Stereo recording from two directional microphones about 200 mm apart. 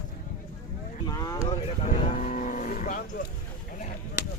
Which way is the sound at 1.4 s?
35° left (ahead or behind).